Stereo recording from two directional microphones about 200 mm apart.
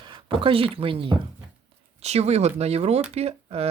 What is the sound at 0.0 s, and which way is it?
Speech, 25° right (ahead or behind).